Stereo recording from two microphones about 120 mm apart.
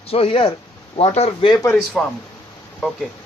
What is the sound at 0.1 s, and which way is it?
A man's voice, 50° left (ahead or behind).